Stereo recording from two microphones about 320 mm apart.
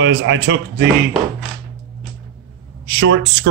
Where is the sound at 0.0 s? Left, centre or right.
Right.